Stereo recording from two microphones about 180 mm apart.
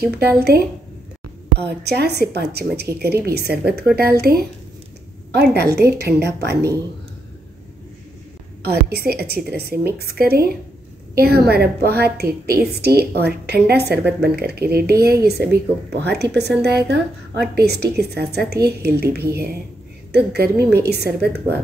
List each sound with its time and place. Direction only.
1.6 s a woman's voice: 65° right (ahead or behind)
8.6 s a woman's voice: 60° right (ahead or behind)